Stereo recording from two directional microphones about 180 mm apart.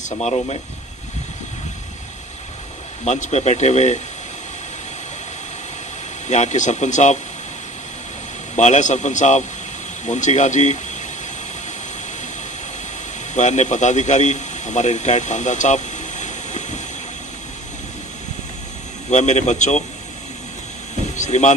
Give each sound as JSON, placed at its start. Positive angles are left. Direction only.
{"t": 0.0, "sound": "speech", "side_deg": 40}
{"t": 3.1, "sound": "speech", "side_deg": 40}
{"t": 6.2, "sound": "speech", "side_deg": 40}
{"t": 8.5, "sound": "speech", "side_deg": 40}
{"t": 13.3, "sound": "a man's voice", "side_deg": 40}
{"t": 19.0, "sound": "speech", "side_deg": 40}
{"t": 21.2, "sound": "speech", "side_deg": 40}